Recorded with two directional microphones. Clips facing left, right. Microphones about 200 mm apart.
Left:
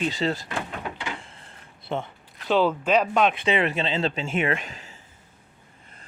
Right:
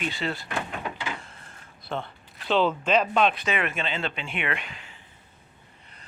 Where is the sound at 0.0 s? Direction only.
35° left (ahead or behind).